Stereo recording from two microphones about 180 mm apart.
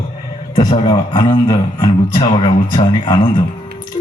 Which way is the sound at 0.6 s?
25° left (ahead or behind).